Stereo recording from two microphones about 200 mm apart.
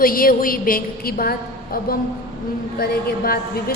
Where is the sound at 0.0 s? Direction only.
45° left (ahead or behind).